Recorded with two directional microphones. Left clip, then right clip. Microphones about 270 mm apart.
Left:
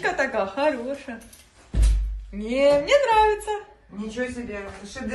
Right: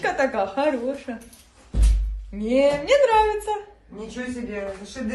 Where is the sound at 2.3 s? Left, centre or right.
Centre.